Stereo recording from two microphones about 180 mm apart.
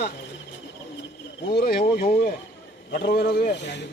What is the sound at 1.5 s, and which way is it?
A man's voice, 55° left (ahead or behind).